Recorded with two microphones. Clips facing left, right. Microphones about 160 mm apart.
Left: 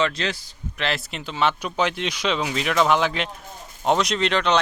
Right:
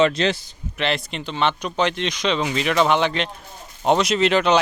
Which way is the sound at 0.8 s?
Centre (ahead or behind).